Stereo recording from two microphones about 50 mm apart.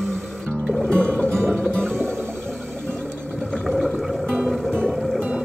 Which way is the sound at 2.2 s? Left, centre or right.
Left.